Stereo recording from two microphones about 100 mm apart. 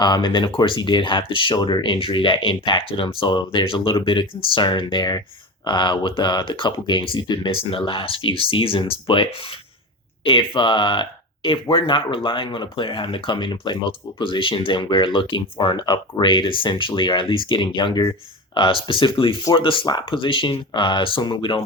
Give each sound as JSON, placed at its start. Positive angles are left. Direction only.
{"t": 0.0, "sound": "speech", "side_deg": 50}